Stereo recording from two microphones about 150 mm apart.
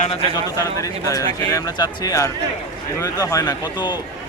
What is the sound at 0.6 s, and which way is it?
A man's voice, 20° left (ahead or behind).